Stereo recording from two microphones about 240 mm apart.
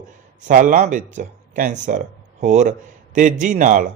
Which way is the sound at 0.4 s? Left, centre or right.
Right.